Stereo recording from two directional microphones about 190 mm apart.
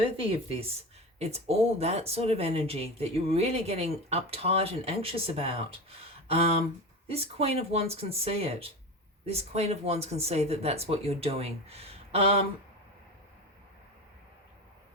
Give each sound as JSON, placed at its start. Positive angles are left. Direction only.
{"t": 0.0, "sound": "speech", "side_deg": -30}